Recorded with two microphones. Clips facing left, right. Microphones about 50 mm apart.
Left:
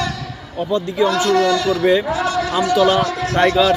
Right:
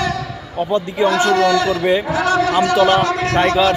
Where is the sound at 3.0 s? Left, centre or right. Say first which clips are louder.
Right 3 dB; right.